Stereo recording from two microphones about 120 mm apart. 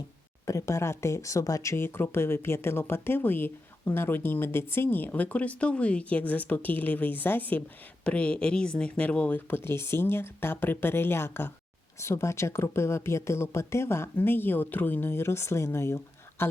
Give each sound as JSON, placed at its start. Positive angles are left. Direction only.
{"t": 0.4, "sound": "speech", "side_deg": 25}